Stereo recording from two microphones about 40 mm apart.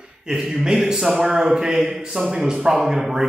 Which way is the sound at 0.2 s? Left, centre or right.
Centre.